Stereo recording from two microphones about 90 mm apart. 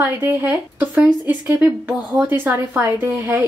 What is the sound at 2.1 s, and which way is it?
A woman's voice, 25° right (ahead or behind).